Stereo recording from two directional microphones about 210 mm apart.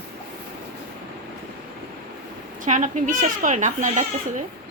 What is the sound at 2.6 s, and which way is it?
A child's voice, 35° right (ahead or behind).